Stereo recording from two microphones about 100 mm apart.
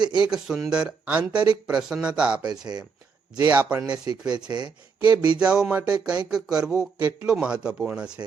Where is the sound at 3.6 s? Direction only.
10° right (ahead or behind).